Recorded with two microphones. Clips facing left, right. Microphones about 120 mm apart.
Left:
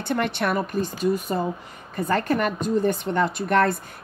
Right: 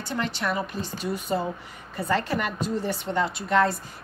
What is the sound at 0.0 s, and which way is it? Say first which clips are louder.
A woman's voice: left 5 dB; 60° left (ahead or behind).